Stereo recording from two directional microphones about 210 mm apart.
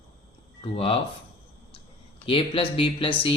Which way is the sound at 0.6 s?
25° left (ahead or behind).